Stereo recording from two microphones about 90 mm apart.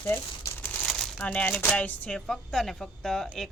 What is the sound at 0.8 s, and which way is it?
Crumpling, 5° left (ahead or behind).